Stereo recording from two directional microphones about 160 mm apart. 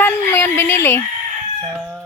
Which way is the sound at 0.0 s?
15° left (ahead or behind).